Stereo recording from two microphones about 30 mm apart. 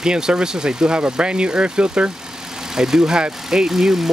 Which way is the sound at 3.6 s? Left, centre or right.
Centre.